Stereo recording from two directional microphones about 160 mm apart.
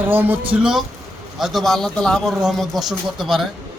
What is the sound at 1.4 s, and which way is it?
Speech, centre (ahead or behind).